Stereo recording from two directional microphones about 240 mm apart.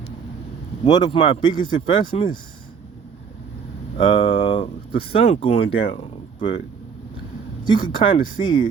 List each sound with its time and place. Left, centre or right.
0.9 s speech: centre
3.9 s speech: left
7.7 s speech: centre